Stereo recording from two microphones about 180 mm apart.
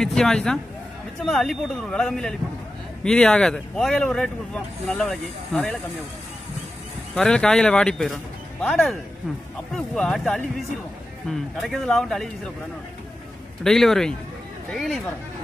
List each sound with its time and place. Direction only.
0.0 s speech: 5° left (ahead or behind)
7.2 s speech: 5° left (ahead or behind)
13.7 s speech: centre (ahead or behind)